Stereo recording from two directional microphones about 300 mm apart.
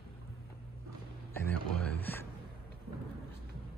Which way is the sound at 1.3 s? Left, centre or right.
Centre.